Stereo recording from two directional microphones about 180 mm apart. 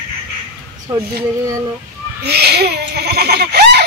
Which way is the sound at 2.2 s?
65° right (ahead or behind).